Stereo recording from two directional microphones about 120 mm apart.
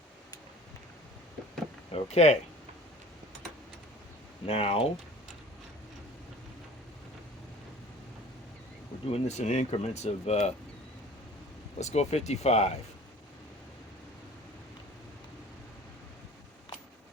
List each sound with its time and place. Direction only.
1.9 s speech: 70° left (ahead or behind)
4.4 s speech: 55° left (ahead or behind)
9.0 s speech: 65° left (ahead or behind)
11.8 s speech: 70° left (ahead or behind)